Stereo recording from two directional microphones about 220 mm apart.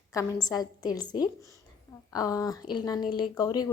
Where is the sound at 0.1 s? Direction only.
15° left (ahead or behind).